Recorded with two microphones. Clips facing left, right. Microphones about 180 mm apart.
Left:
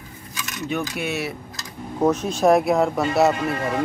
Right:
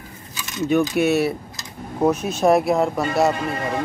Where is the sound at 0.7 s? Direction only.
45° right (ahead or behind).